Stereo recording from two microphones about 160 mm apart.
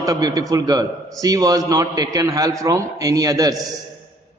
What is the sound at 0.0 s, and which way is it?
A man's voice, 25° right (ahead or behind).